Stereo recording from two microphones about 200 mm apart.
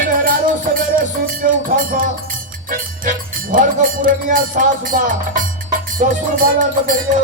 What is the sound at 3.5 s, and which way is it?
Music, 45° right (ahead or behind).